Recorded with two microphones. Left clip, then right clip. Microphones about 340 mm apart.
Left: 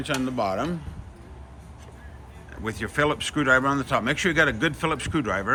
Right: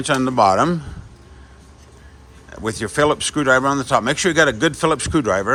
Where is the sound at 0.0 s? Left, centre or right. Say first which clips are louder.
Right 11 dB; centre.